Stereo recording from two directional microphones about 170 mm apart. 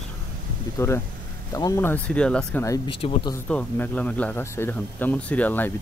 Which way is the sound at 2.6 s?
20° left (ahead or behind).